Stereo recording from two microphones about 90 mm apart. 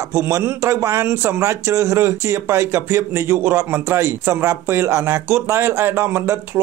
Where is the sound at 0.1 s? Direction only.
30° right (ahead or behind).